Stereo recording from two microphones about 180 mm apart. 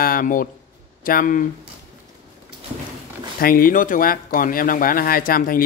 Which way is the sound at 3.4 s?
50° left (ahead or behind).